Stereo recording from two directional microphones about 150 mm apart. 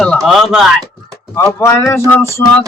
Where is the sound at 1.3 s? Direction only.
15° left (ahead or behind).